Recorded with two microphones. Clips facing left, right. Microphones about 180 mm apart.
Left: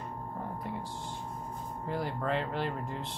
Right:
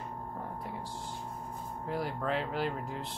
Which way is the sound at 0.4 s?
Centre (ahead or behind).